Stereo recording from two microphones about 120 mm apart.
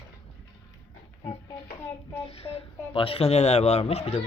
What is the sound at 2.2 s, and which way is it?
Speech, 55° left (ahead or behind).